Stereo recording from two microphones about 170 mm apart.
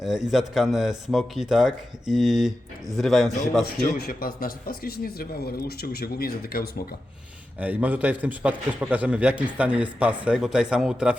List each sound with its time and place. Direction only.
0.0 s speech: 5° right (ahead or behind)
3.6 s a man's voice: 65° left (ahead or behind)
7.6 s a man's voice: 10° right (ahead or behind)